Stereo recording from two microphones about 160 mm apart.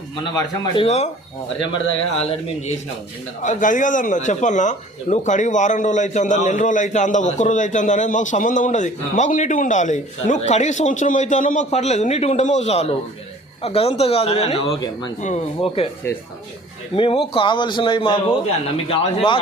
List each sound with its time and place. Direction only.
0.3 s a man's voice: 25° left (ahead or behind)
0.9 s speech: 45° left (ahead or behind)
3.4 s speech: 50° left (ahead or behind); by 15.1 s 30° left (ahead or behind)
15.2 s speech: 45° left (ahead or behind)
16.9 s speech: 35° left (ahead or behind)